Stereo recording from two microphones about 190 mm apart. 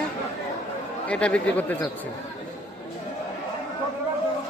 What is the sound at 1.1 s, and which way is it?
Speech, 5° left (ahead or behind).